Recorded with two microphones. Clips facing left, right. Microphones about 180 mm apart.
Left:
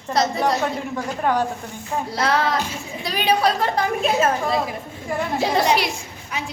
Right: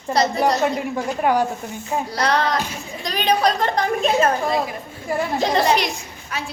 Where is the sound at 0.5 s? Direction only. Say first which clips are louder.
Right 3 dB; 15° right (ahead or behind).